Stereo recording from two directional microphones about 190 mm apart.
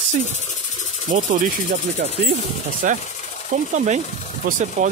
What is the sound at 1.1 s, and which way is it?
Speech, 45° right (ahead or behind).